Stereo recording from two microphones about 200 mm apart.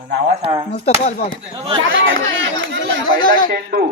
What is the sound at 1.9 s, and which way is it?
Speech, 75° right (ahead or behind).